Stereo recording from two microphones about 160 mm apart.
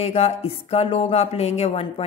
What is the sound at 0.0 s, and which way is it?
Speech, 40° left (ahead or behind).